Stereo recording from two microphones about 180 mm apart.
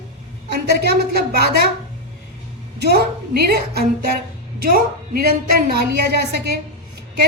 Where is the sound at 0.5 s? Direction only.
65° right (ahead or behind).